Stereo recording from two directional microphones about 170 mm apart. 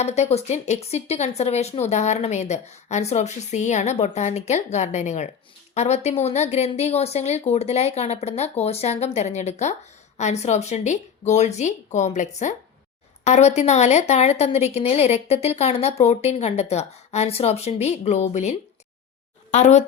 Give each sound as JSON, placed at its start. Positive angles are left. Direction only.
{"t": 0.0, "sound": "a woman's voice", "side_deg": 40}